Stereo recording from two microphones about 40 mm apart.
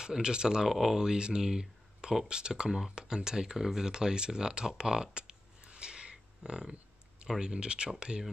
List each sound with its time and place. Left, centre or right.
0.0 s speech: centre
0.7 s speech: centre; by 7.9 s right